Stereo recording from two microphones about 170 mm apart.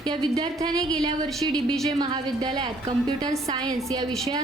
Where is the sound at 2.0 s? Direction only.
25° right (ahead or behind).